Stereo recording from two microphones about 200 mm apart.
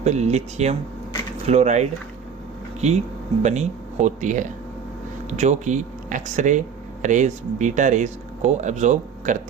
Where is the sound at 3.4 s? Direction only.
35° right (ahead or behind).